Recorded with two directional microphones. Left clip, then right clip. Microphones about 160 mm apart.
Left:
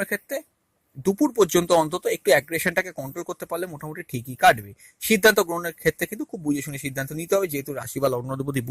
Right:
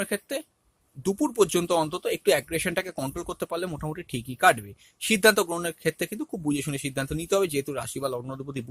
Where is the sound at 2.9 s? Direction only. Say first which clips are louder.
Even; 10° left (ahead or behind); by 8.6 s 35° left (ahead or behind).